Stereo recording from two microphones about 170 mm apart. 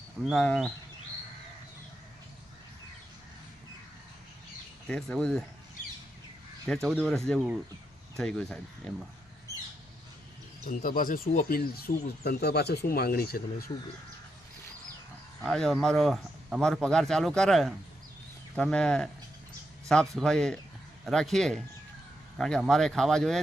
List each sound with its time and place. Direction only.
0.3 s speech: 5° left (ahead or behind)
4.9 s speech: 5° left (ahead or behind)
6.8 s speech: centre (ahead or behind)
10.7 s speech: 55° left (ahead or behind)
15.4 s speech: centre (ahead or behind)